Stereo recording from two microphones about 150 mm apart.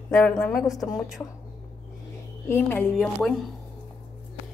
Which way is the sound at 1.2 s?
15° left (ahead or behind).